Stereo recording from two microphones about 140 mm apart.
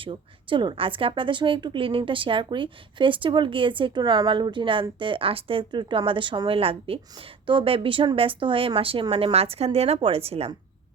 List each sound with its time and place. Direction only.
0.0 s a woman's voice: 35° right (ahead or behind)